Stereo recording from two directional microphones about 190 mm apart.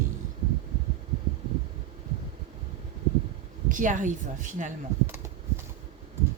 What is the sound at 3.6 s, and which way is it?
Speech, 40° right (ahead or behind).